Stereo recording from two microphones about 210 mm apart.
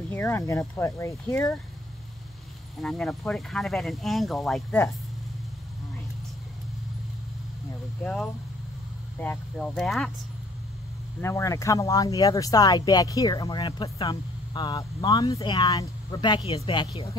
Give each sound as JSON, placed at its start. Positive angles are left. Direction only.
{"t": 0.1, "sound": "speech", "side_deg": 10}
{"t": 2.8, "sound": "speech", "side_deg": 0}
{"t": 8.0, "sound": "speech", "side_deg": 0}
{"t": 11.1, "sound": "speech", "side_deg": 10}